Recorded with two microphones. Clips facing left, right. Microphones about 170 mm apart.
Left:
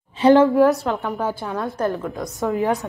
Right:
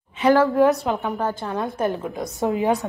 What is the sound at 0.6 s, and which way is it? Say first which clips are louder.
A woman's voice: left 1 dB; centre (ahead or behind).